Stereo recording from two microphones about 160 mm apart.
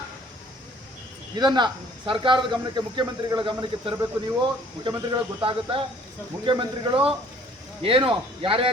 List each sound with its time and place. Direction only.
1.4 s a man's voice: 25° right (ahead or behind)